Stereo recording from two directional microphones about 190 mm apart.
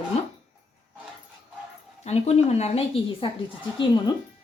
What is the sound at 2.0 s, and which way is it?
A woman's voice, 35° left (ahead or behind).